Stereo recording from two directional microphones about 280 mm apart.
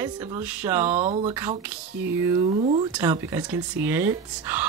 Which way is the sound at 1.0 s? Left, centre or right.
Right.